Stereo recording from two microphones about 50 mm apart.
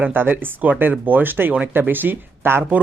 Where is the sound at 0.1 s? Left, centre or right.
Right.